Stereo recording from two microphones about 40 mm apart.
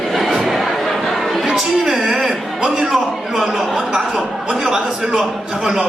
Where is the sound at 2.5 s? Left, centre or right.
Centre.